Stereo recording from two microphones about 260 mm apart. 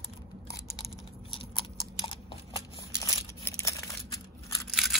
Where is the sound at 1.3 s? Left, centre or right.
Centre.